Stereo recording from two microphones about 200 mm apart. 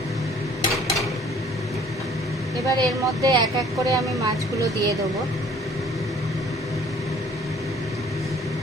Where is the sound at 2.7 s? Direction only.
20° right (ahead or behind).